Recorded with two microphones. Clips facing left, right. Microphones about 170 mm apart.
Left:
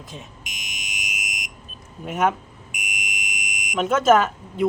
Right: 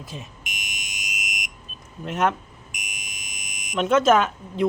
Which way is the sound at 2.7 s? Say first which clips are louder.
Left 8 dB; 15° left (ahead or behind).